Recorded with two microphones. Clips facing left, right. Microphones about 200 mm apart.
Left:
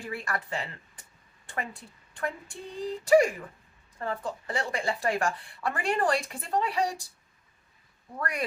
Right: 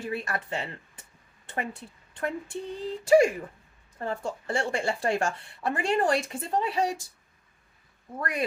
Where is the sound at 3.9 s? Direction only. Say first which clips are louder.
Right 1 dB; 25° right (ahead or behind).